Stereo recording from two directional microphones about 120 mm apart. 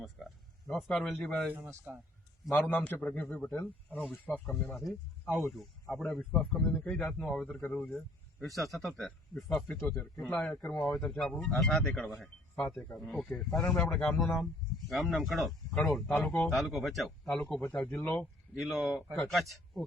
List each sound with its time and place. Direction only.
0.0 s speech: centre (ahead or behind)
1.5 s speech: 20° right (ahead or behind)
2.6 s a man's voice: 15° left (ahead or behind)
18.5 s speech: 5° right (ahead or behind)